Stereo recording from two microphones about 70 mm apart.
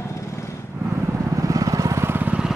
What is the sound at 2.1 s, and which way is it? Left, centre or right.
Vehicle, right.